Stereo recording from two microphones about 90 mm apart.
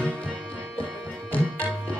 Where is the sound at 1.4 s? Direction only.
25° right (ahead or behind).